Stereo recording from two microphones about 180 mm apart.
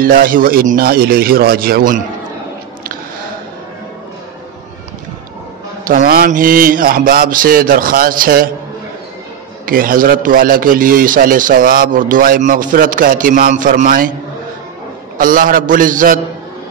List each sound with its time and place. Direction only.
0.0 s a man's voice: 50° right (ahead or behind)
5.9 s a man's voice: 50° right (ahead or behind)
9.7 s a man's voice: 50° right (ahead or behind)
15.1 s a man's voice: 50° right (ahead or behind)